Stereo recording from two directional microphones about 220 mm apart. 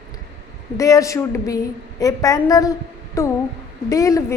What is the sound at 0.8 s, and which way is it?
A woman's voice, 15° left (ahead or behind).